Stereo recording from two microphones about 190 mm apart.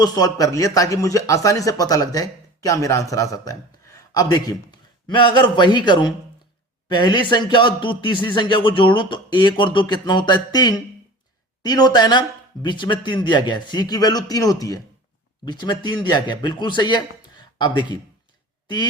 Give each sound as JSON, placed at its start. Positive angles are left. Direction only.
{"t": 0.0, "sound": "a man's voice", "side_deg": 20}